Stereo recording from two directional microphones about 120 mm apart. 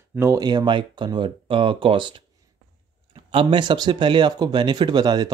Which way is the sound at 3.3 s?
45° right (ahead or behind).